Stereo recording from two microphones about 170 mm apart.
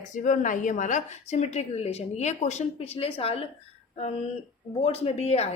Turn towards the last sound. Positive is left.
turn(degrees=40)  # may be behind; listen again after turning